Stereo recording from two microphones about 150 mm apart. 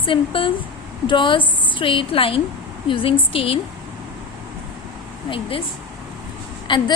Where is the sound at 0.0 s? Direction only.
35° left (ahead or behind).